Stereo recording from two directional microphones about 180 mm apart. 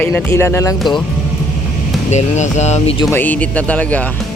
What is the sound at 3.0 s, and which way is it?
Speech, 15° left (ahead or behind).